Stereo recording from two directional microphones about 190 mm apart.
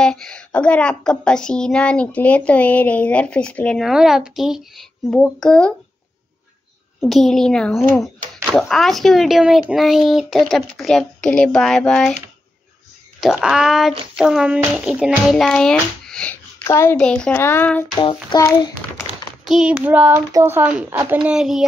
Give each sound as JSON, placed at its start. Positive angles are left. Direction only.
{"t": 0.0, "sound": "speech", "side_deg": 5}
{"t": 7.1, "sound": "speech", "side_deg": 0}
{"t": 13.2, "sound": "speech", "side_deg": 0}
{"t": 17.9, "sound": "a child's voice", "side_deg": 20}
{"t": 19.4, "sound": "speech", "side_deg": -5}